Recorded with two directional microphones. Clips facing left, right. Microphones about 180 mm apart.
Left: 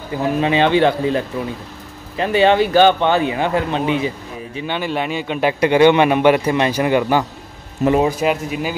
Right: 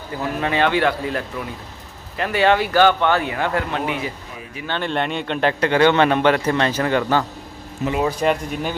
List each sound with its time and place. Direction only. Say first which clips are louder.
0.2 s speech: left 4 dB; 20° left (ahead or behind)
4.6 s a man's voice: left 1 dB; 10° left (ahead or behind)
7.8 s speech: left 8 dB; 50° left (ahead or behind)
8.2 s speech: left 1 dB; 5° left (ahead or behind)